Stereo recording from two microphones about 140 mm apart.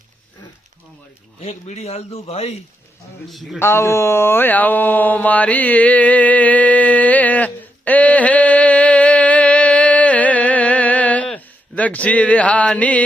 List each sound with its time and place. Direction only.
1.4 s a man's voice: 50° left (ahead or behind)
3.2 s speech: centre (ahead or behind)
3.6 s a sound: 20° left (ahead or behind)